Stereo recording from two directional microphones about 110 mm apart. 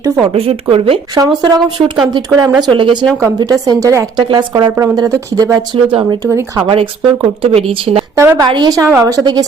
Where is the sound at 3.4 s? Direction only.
35° right (ahead or behind).